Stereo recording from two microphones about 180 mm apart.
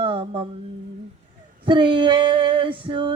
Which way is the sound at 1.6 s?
25° right (ahead or behind).